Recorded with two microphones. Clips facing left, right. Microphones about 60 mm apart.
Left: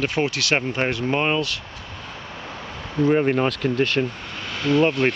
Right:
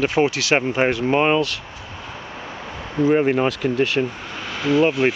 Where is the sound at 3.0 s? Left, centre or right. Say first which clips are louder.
Right 2 dB; centre.